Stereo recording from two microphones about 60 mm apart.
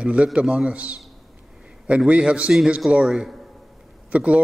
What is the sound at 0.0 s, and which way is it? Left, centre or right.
A man's voice, centre.